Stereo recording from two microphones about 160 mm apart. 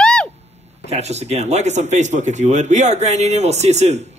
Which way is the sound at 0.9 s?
45° right (ahead or behind).